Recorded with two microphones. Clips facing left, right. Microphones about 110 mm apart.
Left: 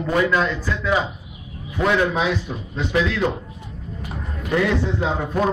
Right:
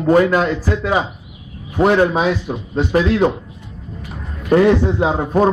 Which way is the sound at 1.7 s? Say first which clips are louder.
Right 6 dB; 40° right (ahead or behind).